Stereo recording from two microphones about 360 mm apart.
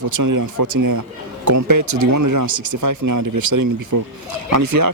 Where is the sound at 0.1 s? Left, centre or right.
Right.